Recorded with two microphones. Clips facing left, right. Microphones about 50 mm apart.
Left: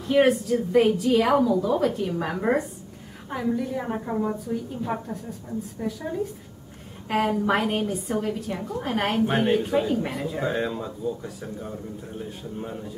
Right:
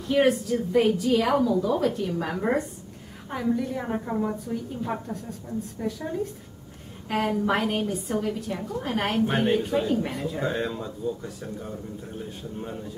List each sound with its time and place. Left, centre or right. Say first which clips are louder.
0.0 s a woman's voice: left 2 dB; centre